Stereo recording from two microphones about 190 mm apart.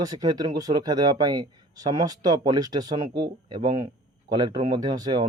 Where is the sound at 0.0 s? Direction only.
20° right (ahead or behind).